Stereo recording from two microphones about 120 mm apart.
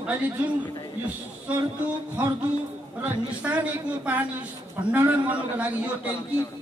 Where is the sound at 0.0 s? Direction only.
15° right (ahead or behind).